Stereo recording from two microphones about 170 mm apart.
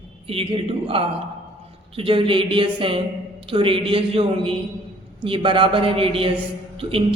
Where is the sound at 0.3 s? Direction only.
35° right (ahead or behind).